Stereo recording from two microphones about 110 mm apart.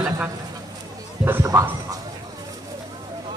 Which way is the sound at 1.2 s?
25° right (ahead or behind).